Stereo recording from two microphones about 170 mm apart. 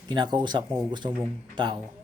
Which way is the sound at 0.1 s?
25° right (ahead or behind).